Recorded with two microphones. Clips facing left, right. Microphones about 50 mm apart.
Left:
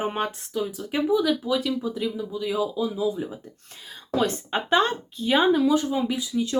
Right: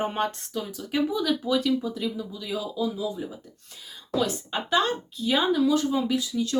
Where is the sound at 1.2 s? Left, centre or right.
Centre.